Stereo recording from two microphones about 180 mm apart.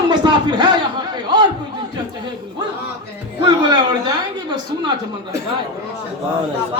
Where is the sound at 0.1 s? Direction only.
25° right (ahead or behind).